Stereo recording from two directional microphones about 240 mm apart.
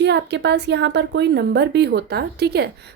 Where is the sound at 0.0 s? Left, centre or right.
Right.